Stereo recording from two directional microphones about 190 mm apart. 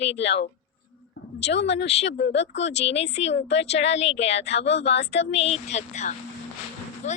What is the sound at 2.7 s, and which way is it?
Speech, 35° left (ahead or behind).